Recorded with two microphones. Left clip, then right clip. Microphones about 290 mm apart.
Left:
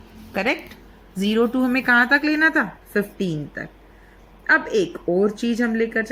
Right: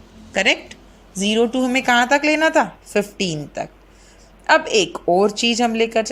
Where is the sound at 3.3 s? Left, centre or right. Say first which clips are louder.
Right 4 dB; right.